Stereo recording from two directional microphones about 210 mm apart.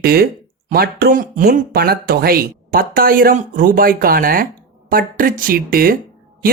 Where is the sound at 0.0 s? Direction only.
45° right (ahead or behind).